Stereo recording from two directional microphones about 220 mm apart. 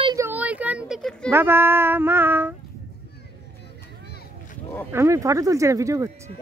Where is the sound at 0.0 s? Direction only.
15° right (ahead or behind); by 1.3 s centre (ahead or behind).